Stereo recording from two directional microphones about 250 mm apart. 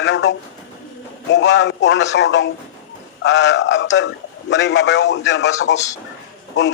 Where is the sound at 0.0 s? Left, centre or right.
Left.